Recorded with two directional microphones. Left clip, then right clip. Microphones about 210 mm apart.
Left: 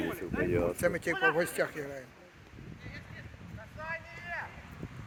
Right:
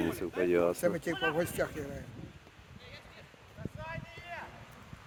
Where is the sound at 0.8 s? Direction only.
10° left (ahead or behind).